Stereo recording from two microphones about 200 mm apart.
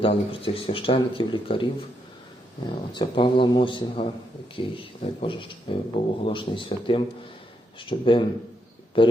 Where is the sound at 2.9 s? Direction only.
25° left (ahead or behind).